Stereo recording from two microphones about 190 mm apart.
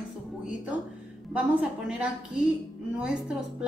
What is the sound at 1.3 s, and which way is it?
Speech, 5° right (ahead or behind).